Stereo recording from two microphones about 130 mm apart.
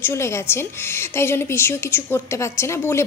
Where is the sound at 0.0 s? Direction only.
20° left (ahead or behind).